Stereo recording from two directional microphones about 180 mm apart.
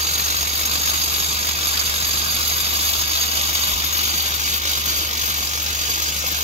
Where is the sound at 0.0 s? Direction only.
40° right (ahead or behind).